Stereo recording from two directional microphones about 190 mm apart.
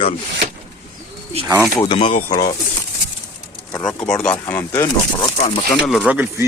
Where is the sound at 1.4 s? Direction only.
10° right (ahead or behind).